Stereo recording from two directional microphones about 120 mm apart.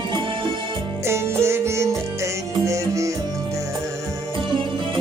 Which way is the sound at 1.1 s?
20° right (ahead or behind).